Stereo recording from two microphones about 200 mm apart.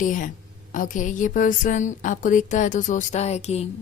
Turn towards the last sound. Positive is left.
turn(degrees=30)  # may be behind; listen again after turning